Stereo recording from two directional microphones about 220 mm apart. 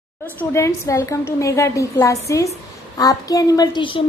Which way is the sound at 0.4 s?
15° left (ahead or behind).